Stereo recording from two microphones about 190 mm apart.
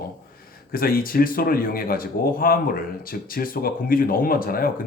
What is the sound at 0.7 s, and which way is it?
Speech, 50° left (ahead or behind).